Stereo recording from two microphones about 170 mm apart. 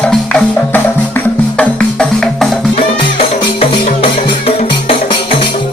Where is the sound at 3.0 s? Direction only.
30° left (ahead or behind).